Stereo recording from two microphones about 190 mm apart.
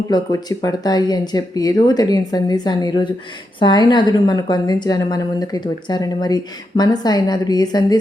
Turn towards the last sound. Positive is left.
turn(degrees=20)  # may be behind; listen again after turning